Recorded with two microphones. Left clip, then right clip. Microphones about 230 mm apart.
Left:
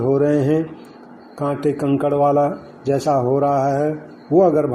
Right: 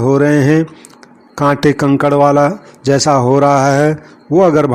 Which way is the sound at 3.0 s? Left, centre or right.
Right.